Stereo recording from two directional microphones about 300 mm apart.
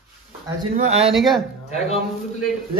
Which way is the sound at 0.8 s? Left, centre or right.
Right.